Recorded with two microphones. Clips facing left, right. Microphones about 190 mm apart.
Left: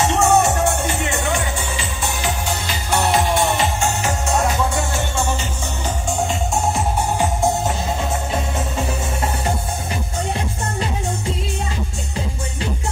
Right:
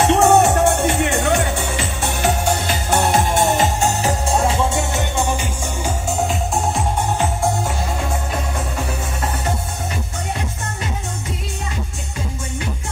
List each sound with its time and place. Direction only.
0.0 s music: 60° right (ahead or behind); by 5.5 s 15° right (ahead or behind)